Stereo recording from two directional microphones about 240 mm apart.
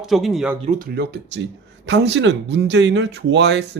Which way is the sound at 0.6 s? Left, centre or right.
Right.